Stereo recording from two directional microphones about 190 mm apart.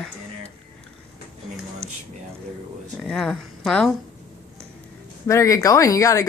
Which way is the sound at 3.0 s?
Centre (ahead or behind).